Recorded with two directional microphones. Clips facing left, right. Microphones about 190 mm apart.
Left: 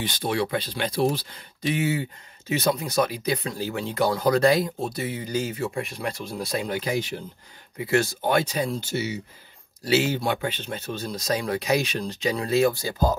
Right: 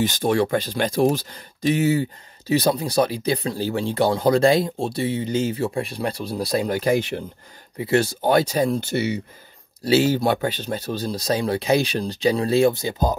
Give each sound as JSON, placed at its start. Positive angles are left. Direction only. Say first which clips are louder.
{"t": 0.0, "sound": "speech", "louder": "right 6 dB", "side_deg": -45}
{"t": 7.7, "sound": "speech", "louder": "right 3 dB", "side_deg": -30}
{"t": 8.8, "sound": "speech", "louder": "right 5 dB", "side_deg": -60}
{"t": 9.8, "sound": "speech", "louder": "right 5 dB", "side_deg": -35}